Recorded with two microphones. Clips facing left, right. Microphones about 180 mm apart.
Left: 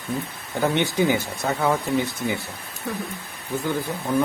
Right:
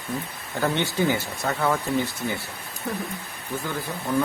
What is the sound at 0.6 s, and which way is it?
Speech, 15° left (ahead or behind).